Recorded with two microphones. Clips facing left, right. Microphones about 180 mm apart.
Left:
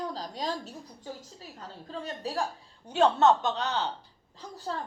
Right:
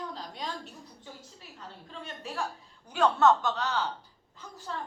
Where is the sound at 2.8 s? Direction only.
25° left (ahead or behind).